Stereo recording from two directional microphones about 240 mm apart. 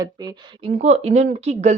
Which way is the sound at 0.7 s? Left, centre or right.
Right.